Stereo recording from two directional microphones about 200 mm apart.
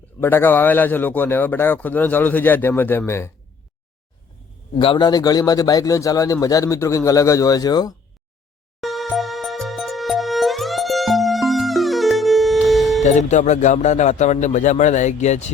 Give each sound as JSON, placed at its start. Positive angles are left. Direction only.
{"t": 0.2, "sound": "a man's voice", "side_deg": 10}
{"t": 4.8, "sound": "a man's voice", "side_deg": 25}
{"t": 8.8, "sound": "music", "side_deg": 0}
{"t": 13.1, "sound": "a man's voice", "side_deg": 35}